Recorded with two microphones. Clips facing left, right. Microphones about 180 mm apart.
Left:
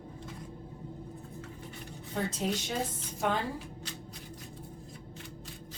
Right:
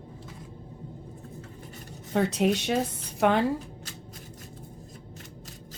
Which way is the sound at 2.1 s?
75° right (ahead or behind).